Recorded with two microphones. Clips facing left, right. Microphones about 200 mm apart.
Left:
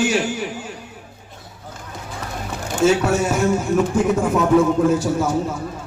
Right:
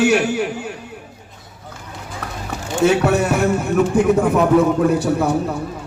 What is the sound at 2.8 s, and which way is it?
A man's voice, 60° right (ahead or behind).